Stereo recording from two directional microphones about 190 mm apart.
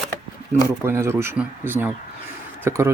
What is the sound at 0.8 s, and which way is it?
Speech, 15° right (ahead or behind).